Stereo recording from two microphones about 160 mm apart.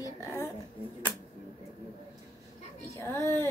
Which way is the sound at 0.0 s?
20° left (ahead or behind).